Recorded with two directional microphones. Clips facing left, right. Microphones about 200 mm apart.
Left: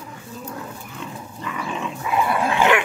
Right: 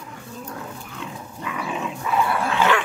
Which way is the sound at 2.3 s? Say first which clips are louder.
Left 4 dB; 15° left (ahead or behind).